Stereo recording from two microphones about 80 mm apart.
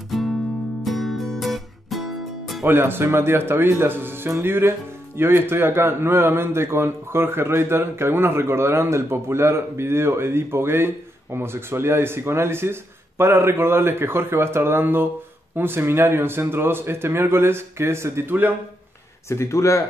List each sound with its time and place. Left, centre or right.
0.1 s music: centre
2.6 s speech: right
19.2 s speech: left